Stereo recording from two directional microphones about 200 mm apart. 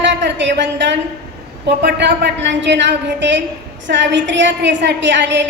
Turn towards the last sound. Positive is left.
turn(degrees=-60)  # may be behind; listen again after turning